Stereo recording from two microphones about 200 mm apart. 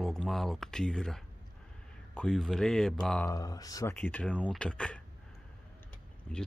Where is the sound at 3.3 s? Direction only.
20° left (ahead or behind).